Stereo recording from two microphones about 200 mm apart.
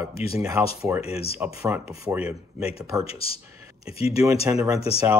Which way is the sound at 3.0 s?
30° left (ahead or behind).